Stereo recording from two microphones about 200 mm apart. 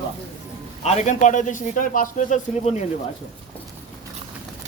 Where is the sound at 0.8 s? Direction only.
35° left (ahead or behind).